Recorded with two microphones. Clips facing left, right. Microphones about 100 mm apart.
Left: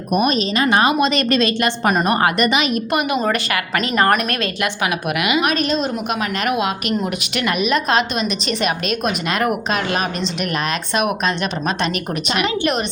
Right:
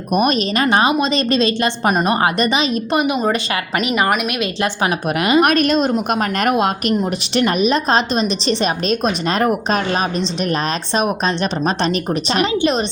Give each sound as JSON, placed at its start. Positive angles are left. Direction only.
{"t": 0.2, "sound": "a woman's voice", "side_deg": -45}
{"t": 0.7, "sound": "a woman's voice", "side_deg": -25}
{"t": 4.6, "sound": "a woman's voice", "side_deg": -35}
{"t": 5.4, "sound": "a woman's voice", "side_deg": -50}
{"t": 7.0, "sound": "a woman's voice", "side_deg": -30}